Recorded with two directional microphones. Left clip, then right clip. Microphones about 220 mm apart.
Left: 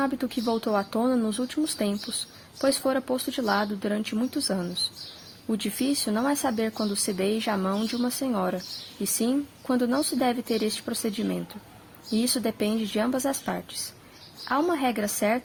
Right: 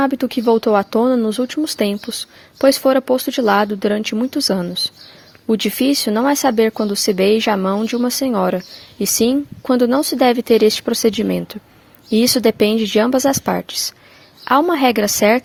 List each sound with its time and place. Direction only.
0.0 s a woman's voice: 40° right (ahead or behind)